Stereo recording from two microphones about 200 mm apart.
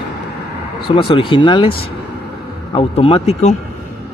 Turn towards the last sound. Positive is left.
turn(degrees=30)  # may be behind; listen again after turning